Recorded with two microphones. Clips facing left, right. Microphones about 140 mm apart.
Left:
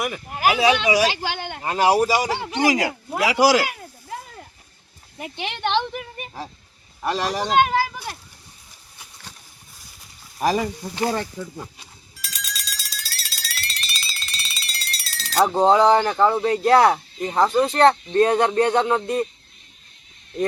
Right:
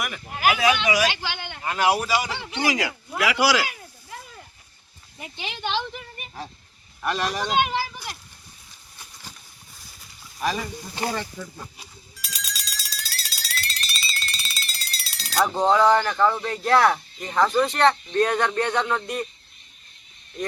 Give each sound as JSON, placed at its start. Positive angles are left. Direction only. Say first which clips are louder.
{"t": 0.3, "sound": "a man's voice", "louder": "left 2 dB", "side_deg": 35}
{"t": 1.6, "sound": "a man's voice", "louder": "left 4 dB", "side_deg": 35}
{"t": 5.1, "sound": "speech", "louder": "left 5 dB", "side_deg": 60}
{"t": 7.0, "sound": "speech", "louder": "left 2 dB", "side_deg": 30}
{"t": 10.4, "sound": "a man's voice", "louder": "left 6 dB", "side_deg": 40}
{"t": 11.3, "sound": "speech", "louder": "left 4 dB", "side_deg": 10}
{"t": 12.1, "sound": "a sound", "louder": "left 2 dB", "side_deg": 0}
{"t": 15.4, "sound": "speech", "louder": "left 3 dB", "side_deg": 30}